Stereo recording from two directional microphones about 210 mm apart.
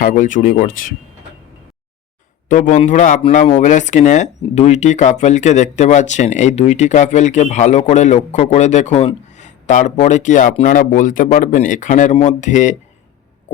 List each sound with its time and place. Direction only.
0.0 s speech: 40° left (ahead or behind)
2.5 s speech: 35° left (ahead or behind)